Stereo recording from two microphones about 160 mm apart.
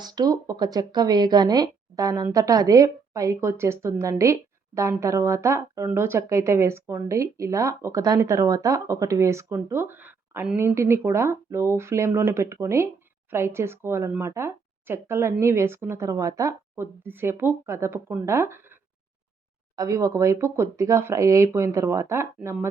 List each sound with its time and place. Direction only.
0.0 s a woman's voice: 25° right (ahead or behind)